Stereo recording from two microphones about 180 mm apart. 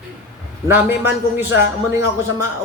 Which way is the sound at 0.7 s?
10° right (ahead or behind).